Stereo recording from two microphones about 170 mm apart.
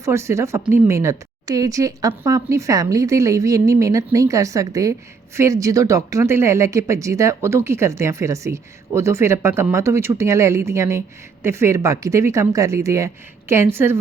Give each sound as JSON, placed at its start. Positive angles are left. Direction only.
{"t": 0.0, "sound": "speech", "side_deg": -15}